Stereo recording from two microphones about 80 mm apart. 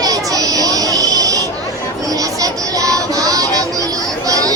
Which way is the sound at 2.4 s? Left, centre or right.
Right.